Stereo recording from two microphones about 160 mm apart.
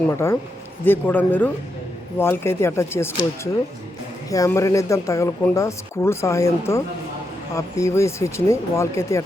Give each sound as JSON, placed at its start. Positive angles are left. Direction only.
{"t": 0.9, "sound": "speech", "side_deg": 10}